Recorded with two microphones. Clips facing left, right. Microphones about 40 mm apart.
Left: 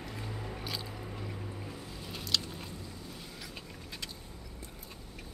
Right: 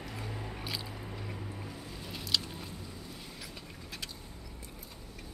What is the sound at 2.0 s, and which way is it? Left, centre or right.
Biting, centre.